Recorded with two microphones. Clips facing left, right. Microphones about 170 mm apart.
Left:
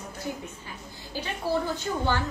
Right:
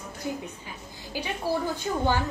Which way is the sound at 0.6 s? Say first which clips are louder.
Right 1 dB; 15° right (ahead or behind).